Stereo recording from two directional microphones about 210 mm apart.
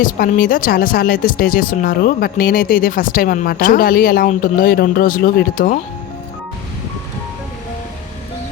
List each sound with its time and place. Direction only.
0.0 s speech: 40° left (ahead or behind)